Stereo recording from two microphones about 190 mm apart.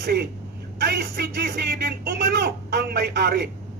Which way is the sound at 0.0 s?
55° right (ahead or behind).